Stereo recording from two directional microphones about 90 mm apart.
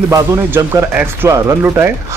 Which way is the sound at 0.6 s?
30° right (ahead or behind).